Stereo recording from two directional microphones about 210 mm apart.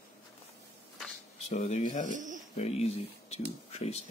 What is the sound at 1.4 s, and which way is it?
Speech, 35° left (ahead or behind).